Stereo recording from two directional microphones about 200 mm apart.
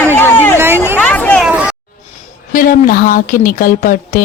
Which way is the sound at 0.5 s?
10° right (ahead or behind).